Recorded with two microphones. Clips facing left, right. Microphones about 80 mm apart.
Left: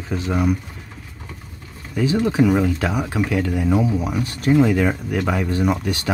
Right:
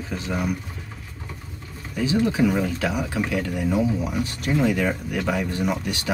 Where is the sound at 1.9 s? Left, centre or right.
Left.